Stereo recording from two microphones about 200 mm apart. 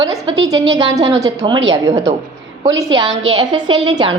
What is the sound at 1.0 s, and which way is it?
Speech, 20° right (ahead or behind).